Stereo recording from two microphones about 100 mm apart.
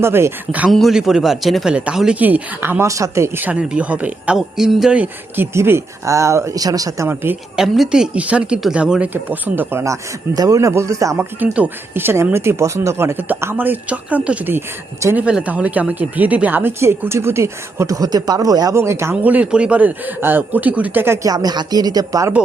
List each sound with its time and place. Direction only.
0.0 s speech: 25° right (ahead or behind)
0.7 s speech: centre (ahead or behind); by 3.4 s 30° right (ahead or behind)
3.4 s speech: 10° right (ahead or behind)
4.4 s speech: 5° right (ahead or behind)
5.5 s speech: 25° right (ahead or behind)
7.5 s speech: 5° right (ahead or behind)
9.8 s speech: 35° right (ahead or behind)
11.3 s speech: 15° right (ahead or behind); by 18.7 s 40° right (ahead or behind)
18.7 s speech: 25° right (ahead or behind)
19.1 s speech: 15° right (ahead or behind)
21.2 s speech: 40° right (ahead or behind)